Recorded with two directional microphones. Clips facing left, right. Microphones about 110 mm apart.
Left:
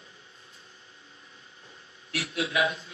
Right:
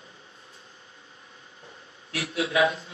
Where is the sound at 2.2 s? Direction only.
40° right (ahead or behind).